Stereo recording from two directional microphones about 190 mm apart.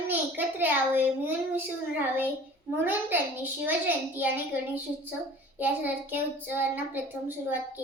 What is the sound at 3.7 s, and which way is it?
A child's voice, 10° right (ahead or behind).